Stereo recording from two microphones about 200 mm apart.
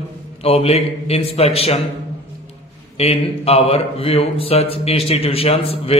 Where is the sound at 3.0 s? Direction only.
30° left (ahead or behind).